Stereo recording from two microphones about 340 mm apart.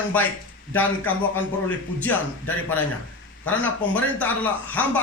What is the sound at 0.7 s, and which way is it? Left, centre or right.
Speech, centre.